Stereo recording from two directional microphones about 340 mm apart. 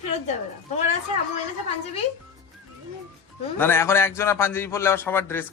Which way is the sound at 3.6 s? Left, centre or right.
Centre.